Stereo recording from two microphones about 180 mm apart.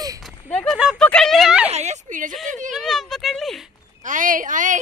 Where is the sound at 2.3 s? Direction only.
Centre (ahead or behind).